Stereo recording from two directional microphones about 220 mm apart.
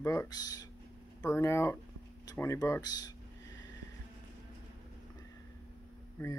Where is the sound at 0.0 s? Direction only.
15° left (ahead or behind).